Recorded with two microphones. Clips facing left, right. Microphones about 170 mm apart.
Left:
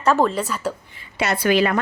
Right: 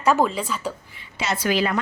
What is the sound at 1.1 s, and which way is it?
Speech, 60° left (ahead or behind).